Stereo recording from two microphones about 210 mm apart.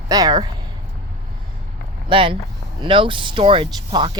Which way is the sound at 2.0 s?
25° right (ahead or behind).